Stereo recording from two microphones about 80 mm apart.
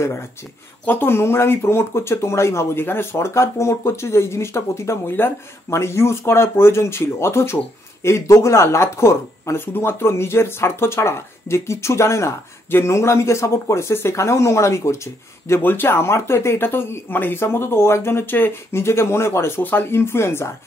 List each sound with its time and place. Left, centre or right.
0.8 s speech: left